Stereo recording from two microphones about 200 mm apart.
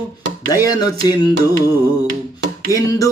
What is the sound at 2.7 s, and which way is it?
Carnatic music, 15° left (ahead or behind).